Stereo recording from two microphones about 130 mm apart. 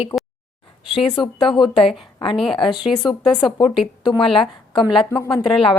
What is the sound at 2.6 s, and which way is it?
A woman's voice, 35° left (ahead or behind).